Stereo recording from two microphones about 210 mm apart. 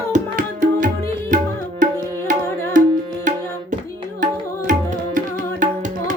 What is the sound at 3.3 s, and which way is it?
Tabla, 35° right (ahead or behind).